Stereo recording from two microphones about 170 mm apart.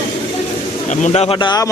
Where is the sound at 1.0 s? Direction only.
35° left (ahead or behind).